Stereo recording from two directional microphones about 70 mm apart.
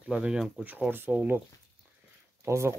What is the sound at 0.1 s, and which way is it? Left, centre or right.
Speech, centre.